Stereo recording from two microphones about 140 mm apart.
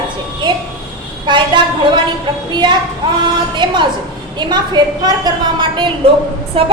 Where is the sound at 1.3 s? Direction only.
30° right (ahead or behind).